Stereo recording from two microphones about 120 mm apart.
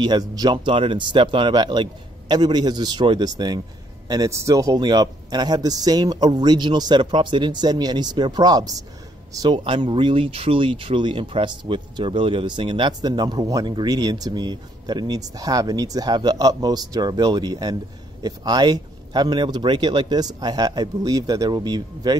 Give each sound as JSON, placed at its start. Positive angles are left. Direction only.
{"t": 0.0, "sound": "speech", "side_deg": -35}
{"t": 9.6, "sound": "speech", "side_deg": -45}